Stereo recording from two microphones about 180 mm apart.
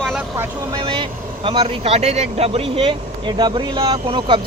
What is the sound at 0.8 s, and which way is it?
Speech, 30° right (ahead or behind).